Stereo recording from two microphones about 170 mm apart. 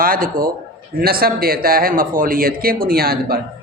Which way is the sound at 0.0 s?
55° right (ahead or behind).